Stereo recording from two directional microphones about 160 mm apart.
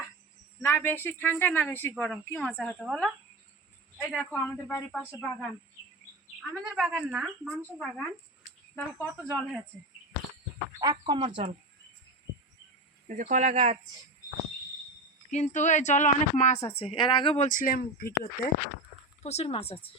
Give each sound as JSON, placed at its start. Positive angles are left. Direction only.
{"t": 0.6, "sound": "speech", "side_deg": 15}
{"t": 6.7, "sound": "a woman's voice", "side_deg": -5}
{"t": 10.8, "sound": "speech", "side_deg": -25}
{"t": 13.1, "sound": "speech", "side_deg": -55}
{"t": 15.3, "sound": "a woman's voice", "side_deg": 50}
{"t": 19.2, "sound": "speech", "side_deg": 40}